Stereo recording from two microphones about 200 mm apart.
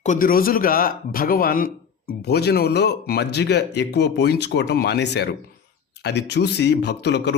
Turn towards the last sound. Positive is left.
turn(degrees=60)  # may be behind; listen again after turning